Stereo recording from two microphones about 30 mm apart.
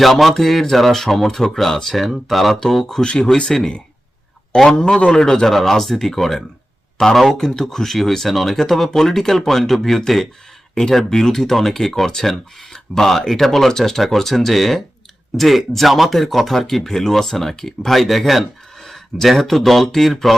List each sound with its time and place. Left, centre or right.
0.0 s speech: centre
3.0 s speech: left
4.5 s speech: centre
4.9 s a man's voice: left
5.2 s speech: left
5.5 s speech: centre
7.0 s speech: left
10.8 s speech: left
11.1 s speech: centre